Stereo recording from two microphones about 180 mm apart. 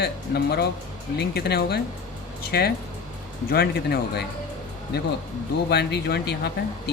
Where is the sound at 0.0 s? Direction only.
65° left (ahead or behind).